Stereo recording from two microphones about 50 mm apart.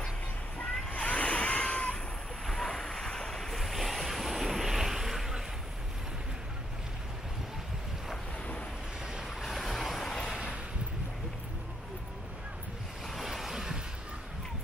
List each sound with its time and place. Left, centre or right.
0.8 s vehicle: left
2.4 s waves: centre
9.0 s vehicle: centre
9.5 s vehicle: centre
13.0 s a sound: centre